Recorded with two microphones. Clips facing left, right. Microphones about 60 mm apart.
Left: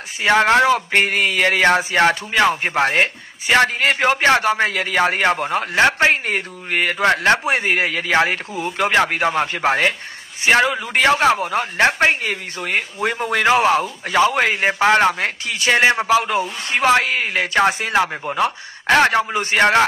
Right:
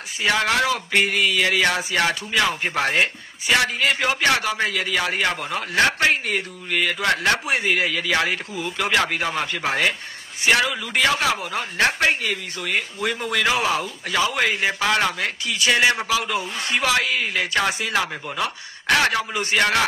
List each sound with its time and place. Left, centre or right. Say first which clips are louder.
0.2 s speech: left 6 dB; left
5.8 s speech: left 3 dB; left